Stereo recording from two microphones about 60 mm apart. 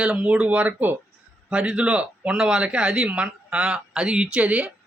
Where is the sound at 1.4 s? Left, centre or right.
Centre.